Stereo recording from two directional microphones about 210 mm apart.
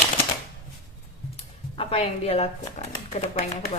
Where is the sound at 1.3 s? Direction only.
30° left (ahead or behind).